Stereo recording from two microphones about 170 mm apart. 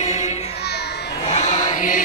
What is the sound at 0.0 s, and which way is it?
Music, 40° left (ahead or behind).